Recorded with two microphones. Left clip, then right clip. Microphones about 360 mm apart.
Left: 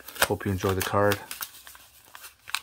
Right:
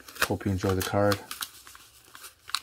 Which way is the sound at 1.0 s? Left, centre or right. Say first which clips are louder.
Left 2 dB; left.